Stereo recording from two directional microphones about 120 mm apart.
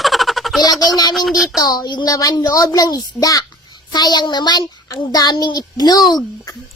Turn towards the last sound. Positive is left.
turn(degrees=35)  # may be behind; listen again after turning